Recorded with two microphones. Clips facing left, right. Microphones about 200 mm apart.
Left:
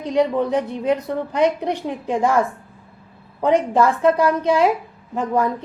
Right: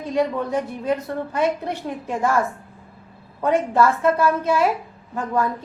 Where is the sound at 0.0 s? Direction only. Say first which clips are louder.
Left 3 dB; 20° left (ahead or behind).